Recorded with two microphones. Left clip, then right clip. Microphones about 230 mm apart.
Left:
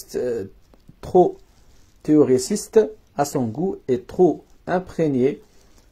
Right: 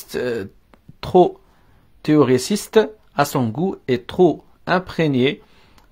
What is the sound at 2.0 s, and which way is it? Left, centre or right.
Speech, right.